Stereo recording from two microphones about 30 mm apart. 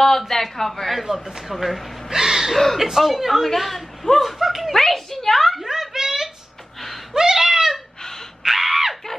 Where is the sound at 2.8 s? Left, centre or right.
Centre.